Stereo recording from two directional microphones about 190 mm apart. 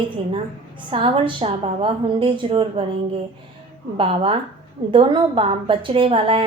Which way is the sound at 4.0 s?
30° right (ahead or behind).